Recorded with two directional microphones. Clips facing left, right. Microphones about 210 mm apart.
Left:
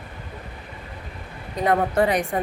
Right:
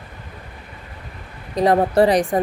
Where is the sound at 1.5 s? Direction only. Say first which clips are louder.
Right 5 dB; 35° right (ahead or behind).